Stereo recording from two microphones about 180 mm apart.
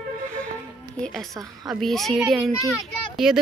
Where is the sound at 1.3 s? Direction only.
20° right (ahead or behind).